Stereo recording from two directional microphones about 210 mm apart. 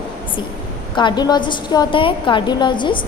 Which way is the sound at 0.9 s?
20° left (ahead or behind).